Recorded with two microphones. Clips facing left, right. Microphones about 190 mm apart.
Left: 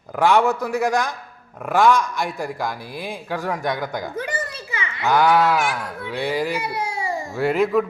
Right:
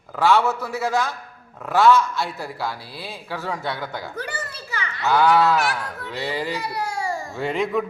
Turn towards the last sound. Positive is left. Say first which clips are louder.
# left 4 dB
turn(degrees=5)  # may be behind; listen again after turning